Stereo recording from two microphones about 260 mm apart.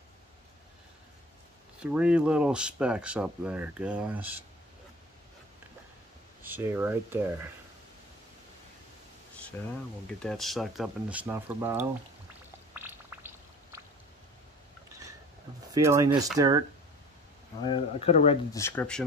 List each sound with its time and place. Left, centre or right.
1.8 s speech: centre
6.4 s speech: centre
9.6 s speech: centre
12.7 s a sound: centre
15.7 s speech: centre
17.6 s speech: centre
18.6 s speech: centre